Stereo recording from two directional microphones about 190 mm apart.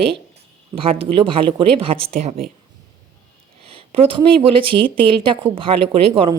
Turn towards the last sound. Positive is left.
turn(degrees=-30)  # may be behind; listen again after turning